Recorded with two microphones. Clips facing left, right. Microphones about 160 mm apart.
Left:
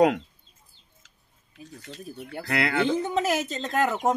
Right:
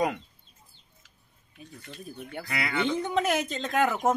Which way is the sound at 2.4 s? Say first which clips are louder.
Left 6 dB; 75° left (ahead or behind).